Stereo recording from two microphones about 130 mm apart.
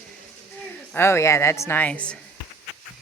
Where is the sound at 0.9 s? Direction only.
20° left (ahead or behind).